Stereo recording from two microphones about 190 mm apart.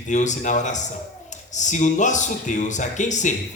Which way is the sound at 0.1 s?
40° left (ahead or behind).